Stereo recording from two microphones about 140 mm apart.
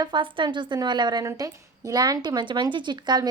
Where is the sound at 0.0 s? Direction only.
35° right (ahead or behind).